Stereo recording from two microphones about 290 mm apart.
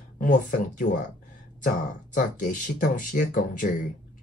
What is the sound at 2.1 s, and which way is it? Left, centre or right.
Speech, left.